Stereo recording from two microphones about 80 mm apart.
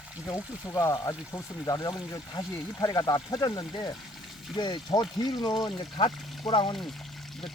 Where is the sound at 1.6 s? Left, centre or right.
Left.